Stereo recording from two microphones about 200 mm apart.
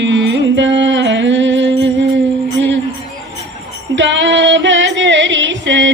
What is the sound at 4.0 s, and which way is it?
Music, 65° right (ahead or behind).